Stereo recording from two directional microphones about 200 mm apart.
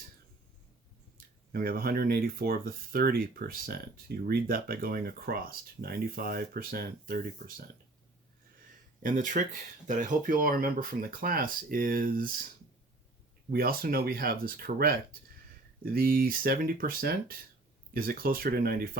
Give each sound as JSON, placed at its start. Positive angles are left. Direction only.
{"t": 1.5, "sound": "speech", "side_deg": -50}
{"t": 9.0, "sound": "speech", "side_deg": -40}
{"t": 13.5, "sound": "speech", "side_deg": -50}